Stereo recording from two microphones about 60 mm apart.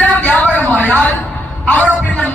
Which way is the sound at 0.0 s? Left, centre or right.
Left.